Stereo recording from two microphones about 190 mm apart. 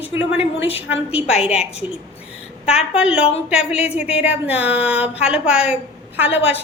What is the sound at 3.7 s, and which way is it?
Speech, 35° left (ahead or behind).